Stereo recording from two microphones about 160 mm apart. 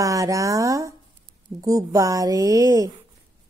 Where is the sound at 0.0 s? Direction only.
20° right (ahead or behind).